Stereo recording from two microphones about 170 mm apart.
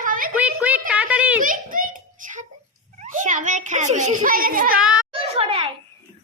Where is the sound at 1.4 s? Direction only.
55° right (ahead or behind).